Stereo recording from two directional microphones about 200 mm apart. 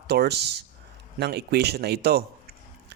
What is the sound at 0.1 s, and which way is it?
Speech, 55° right (ahead or behind).